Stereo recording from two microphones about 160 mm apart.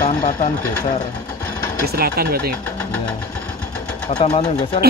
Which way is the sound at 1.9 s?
75° right (ahead or behind).